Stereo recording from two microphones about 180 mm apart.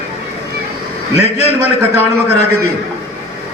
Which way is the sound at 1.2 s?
35° left (ahead or behind).